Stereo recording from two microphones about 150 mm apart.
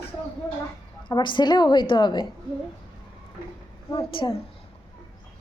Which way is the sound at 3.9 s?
35° left (ahead or behind).